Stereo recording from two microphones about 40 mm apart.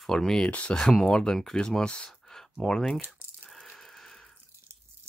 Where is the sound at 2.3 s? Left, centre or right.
Centre.